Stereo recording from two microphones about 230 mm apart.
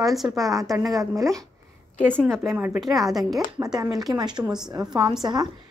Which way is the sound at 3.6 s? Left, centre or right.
Centre.